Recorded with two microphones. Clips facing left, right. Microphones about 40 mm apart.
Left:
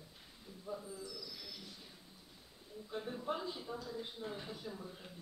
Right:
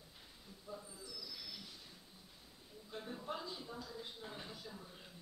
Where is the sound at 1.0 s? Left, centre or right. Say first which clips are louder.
Left 2 dB; centre.